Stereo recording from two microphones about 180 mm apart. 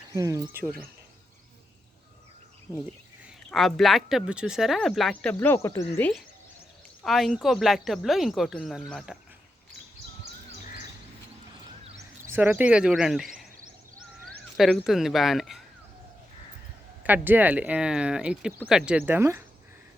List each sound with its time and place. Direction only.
0.1 s speech: 20° right (ahead or behind)
3.2 s speech: centre (ahead or behind)
7.0 s speech: centre (ahead or behind)
12.2 s speech: 10° right (ahead or behind)
14.5 s speech: centre (ahead or behind)
17.0 s speech: 10° right (ahead or behind)